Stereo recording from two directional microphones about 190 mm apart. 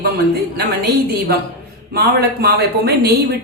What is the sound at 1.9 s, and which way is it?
Speech, 55° right (ahead or behind).